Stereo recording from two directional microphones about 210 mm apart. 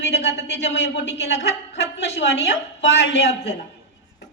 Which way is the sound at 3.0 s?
55° left (ahead or behind).